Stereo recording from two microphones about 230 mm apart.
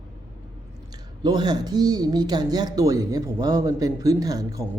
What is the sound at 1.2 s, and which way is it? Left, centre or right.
Speech, centre.